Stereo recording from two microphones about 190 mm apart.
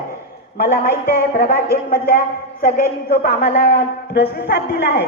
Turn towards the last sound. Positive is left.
turn(degrees=55)  # may be behind; listen again after turning